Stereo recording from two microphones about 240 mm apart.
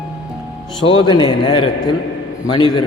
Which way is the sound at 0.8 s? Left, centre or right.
Centre.